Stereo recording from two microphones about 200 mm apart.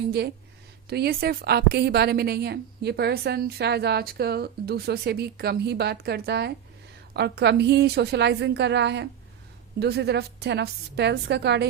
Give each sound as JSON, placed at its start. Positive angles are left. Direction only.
{"t": 0.9, "sound": "a woman's voice", "side_deg": -55}